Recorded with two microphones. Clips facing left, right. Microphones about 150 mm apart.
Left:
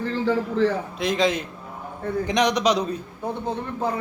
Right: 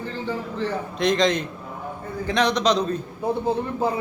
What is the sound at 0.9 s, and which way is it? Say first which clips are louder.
A man's voice: right 2 dB; 5° left (ahead or behind).